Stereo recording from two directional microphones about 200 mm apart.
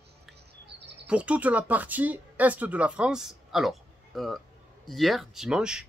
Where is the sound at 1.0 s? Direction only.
5° right (ahead or behind).